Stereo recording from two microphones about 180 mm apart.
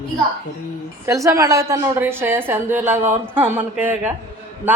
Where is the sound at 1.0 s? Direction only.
15° right (ahead or behind).